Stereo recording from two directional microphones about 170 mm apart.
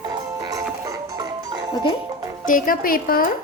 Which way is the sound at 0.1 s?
20° right (ahead or behind).